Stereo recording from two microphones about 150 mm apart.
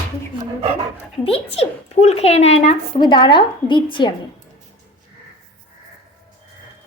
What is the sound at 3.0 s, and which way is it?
A woman's voice, 30° left (ahead or behind).